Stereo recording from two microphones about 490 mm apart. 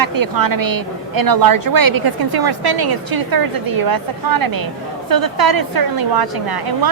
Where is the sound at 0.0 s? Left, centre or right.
Right.